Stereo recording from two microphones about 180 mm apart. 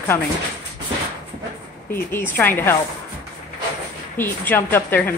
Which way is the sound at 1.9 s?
10° left (ahead or behind).